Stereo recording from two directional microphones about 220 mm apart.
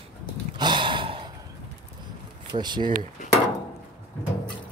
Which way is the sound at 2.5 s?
20° right (ahead or behind).